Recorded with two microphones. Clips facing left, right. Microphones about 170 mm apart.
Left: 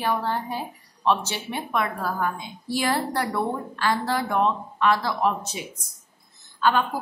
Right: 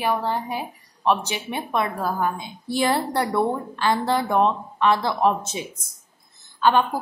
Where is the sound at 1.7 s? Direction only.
25° right (ahead or behind).